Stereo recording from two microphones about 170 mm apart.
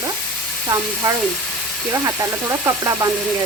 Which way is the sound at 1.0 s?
25° right (ahead or behind).